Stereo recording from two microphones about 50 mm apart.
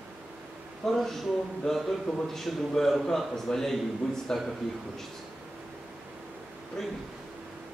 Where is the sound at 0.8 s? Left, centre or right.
Centre.